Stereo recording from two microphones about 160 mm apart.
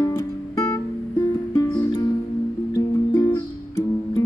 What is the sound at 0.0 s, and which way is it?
Music, 20° left (ahead or behind).